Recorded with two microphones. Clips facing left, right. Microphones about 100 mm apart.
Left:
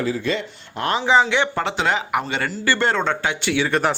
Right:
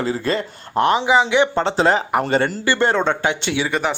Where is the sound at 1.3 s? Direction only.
20° right (ahead or behind).